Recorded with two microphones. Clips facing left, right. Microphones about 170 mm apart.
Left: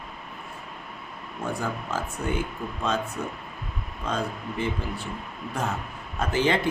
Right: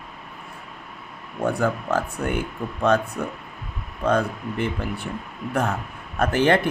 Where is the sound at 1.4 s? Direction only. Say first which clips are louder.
Right 7 dB; 60° right (ahead or behind).